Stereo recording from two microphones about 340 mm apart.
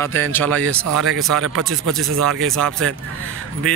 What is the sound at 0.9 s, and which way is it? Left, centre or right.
Speech, right.